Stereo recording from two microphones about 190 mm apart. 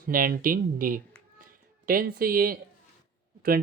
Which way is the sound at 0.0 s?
50° right (ahead or behind).